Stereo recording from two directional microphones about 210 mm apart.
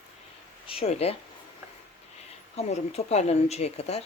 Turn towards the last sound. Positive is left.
turn(degrees=30)  # may be behind; listen again after turning